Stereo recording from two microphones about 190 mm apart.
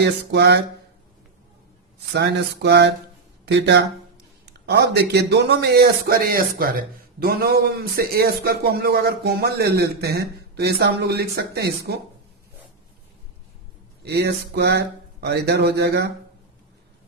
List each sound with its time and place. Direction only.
0.0 s a man's voice: 60° right (ahead or behind)
2.1 s a man's voice: 60° right (ahead or behind)
14.0 s a man's voice: 60° right (ahead or behind)